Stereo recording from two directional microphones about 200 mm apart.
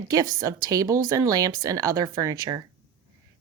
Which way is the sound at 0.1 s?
15° right (ahead or behind).